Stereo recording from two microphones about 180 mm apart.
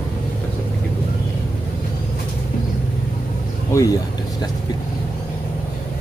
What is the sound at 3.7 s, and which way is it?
Speech, 15° left (ahead or behind).